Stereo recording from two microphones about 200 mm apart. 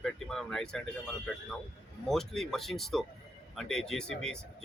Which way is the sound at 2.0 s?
Centre (ahead or behind).